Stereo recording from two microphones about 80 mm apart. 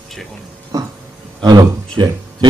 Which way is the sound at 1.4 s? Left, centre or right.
Right.